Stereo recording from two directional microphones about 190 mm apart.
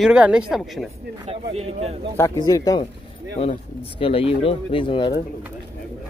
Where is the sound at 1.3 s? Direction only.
35° right (ahead or behind).